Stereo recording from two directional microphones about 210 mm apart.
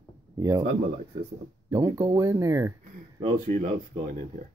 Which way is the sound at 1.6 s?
15° right (ahead or behind).